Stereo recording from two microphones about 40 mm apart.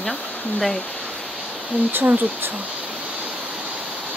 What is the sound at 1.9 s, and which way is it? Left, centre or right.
Speech, right.